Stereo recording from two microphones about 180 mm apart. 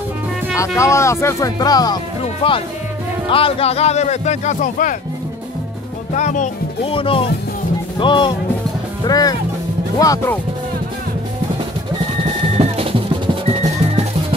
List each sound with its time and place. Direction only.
0.6 s a man's voice: 15° left (ahead or behind); by 4.9 s 45° left (ahead or behind)
6.1 s a man's voice: 40° left (ahead or behind)
6.9 s speech: 30° left (ahead or behind)
12.5 s music: 35° right (ahead or behind)